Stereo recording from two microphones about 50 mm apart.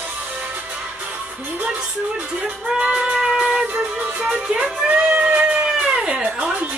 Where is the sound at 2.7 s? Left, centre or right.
Centre.